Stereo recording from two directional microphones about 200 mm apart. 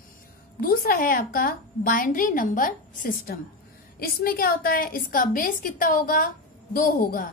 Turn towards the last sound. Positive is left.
turn(degrees=45)  # may be behind; listen again after turning